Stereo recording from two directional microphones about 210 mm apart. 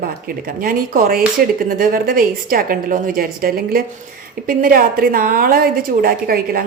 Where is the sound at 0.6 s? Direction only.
45° right (ahead or behind).